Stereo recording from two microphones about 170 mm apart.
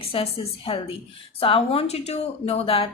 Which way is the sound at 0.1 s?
35° left (ahead or behind).